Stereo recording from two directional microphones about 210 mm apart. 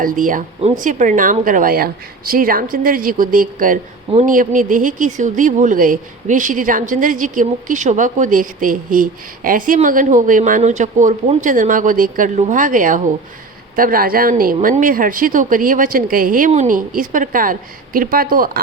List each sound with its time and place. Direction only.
0.0 s a woman's voice: 40° right (ahead or behind)